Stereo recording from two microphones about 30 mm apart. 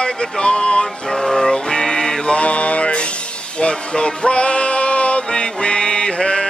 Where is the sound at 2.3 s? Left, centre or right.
Left.